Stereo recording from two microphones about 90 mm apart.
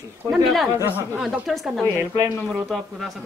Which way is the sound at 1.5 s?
Centre (ahead or behind).